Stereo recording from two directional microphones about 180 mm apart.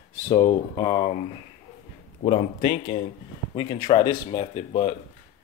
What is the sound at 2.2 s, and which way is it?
Speech, 30° left (ahead or behind).